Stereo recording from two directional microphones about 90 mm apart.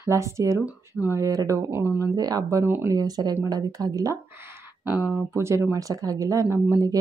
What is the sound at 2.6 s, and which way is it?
Speech, 25° right (ahead or behind).